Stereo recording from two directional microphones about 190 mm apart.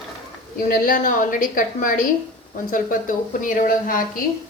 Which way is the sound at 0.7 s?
45° left (ahead or behind).